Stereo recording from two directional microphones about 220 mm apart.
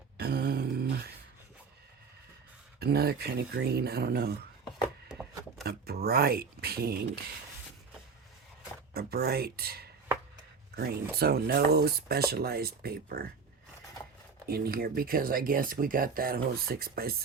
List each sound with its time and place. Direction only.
0.2 s a sound: 45° right (ahead or behind)
2.7 s speech: 45° right (ahead or behind)
5.1 s chopping: 5° right (ahead or behind)
5.6 s speech: 45° right (ahead or behind)
8.9 s speech: 45° right (ahead or behind)
11.2 s speech: 45° right (ahead or behind)
14.4 s speech: 45° right (ahead or behind)